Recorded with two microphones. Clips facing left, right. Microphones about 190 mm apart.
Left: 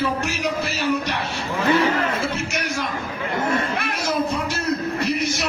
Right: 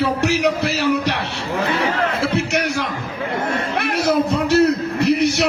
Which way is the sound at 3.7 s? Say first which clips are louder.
Right 6 dB; 70° right (ahead or behind).